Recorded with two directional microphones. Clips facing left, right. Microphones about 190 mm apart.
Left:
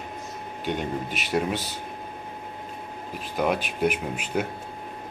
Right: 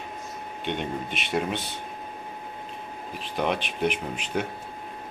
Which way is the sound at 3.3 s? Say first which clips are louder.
Left 2 dB; 5° left (ahead or behind).